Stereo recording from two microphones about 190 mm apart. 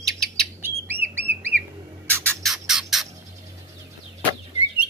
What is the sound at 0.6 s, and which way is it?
Bird, 10° right (ahead or behind).